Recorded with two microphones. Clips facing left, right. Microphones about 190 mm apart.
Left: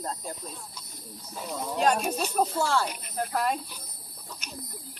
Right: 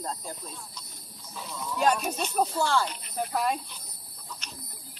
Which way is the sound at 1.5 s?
50° left (ahead or behind).